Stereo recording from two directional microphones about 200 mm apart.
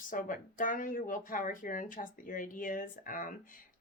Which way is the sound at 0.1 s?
40° left (ahead or behind).